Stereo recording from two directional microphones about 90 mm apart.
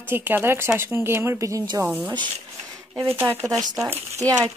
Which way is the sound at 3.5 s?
40° right (ahead or behind).